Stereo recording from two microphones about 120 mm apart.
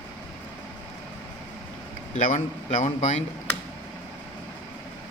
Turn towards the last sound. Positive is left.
turn(degrees=75)  # may be behind; listen again after turning